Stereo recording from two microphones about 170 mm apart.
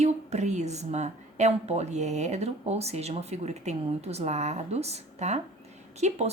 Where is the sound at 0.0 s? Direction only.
40° right (ahead or behind).